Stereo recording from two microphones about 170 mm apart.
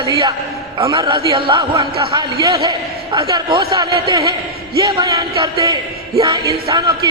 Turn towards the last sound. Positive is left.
turn(degrees=-25)  # may be behind; listen again after turning